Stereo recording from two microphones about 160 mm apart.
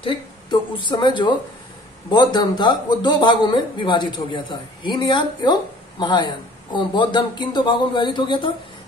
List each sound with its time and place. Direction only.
0.0 s speech: 30° left (ahead or behind)